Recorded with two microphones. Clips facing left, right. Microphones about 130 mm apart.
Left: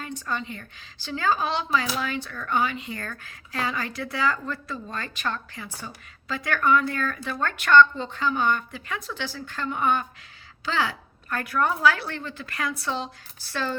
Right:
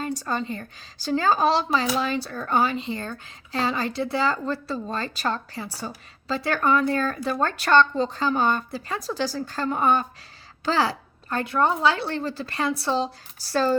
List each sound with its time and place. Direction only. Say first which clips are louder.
0.2 s speech: right 4 dB; 35° right (ahead or behind)